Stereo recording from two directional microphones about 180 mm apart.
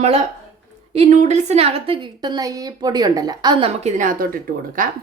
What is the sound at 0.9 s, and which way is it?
A woman's voice, 40° right (ahead or behind).